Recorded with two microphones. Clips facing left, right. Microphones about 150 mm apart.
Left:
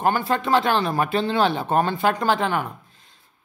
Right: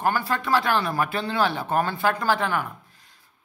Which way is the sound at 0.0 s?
20° left (ahead or behind).